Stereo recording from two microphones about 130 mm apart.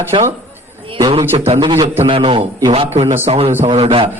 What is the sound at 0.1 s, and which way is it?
Speech, 40° right (ahead or behind).